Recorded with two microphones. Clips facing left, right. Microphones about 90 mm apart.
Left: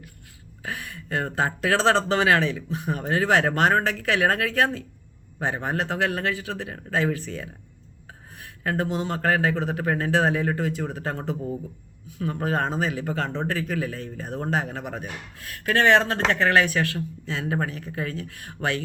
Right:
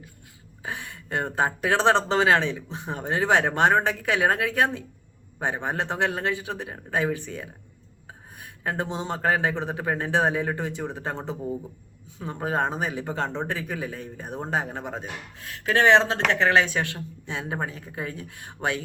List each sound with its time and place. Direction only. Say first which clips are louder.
0.6 s speech: left 1 dB; 25° right (ahead or behind)